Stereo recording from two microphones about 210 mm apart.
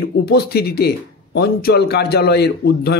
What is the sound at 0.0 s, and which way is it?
Speech, 50° left (ahead or behind).